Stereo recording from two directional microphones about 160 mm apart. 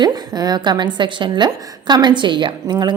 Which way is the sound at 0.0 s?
25° right (ahead or behind).